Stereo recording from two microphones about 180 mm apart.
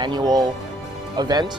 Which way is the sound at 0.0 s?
25° right (ahead or behind).